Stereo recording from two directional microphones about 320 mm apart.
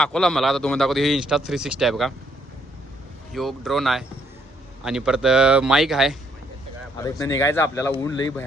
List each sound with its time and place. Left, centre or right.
0.0 s a man's voice: centre
3.3 s a man's voice: centre
6.9 s a man's voice: centre